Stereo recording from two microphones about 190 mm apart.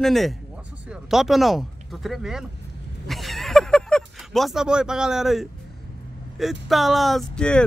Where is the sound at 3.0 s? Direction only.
Centre (ahead or behind).